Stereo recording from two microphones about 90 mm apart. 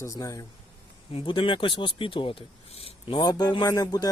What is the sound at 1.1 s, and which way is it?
Speech, 70° left (ahead or behind).